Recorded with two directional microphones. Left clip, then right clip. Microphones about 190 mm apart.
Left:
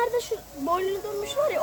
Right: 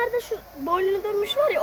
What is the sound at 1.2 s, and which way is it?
Speech, 40° right (ahead or behind).